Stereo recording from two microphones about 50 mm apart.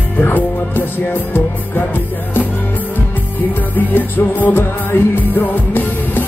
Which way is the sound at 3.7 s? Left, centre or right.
Left.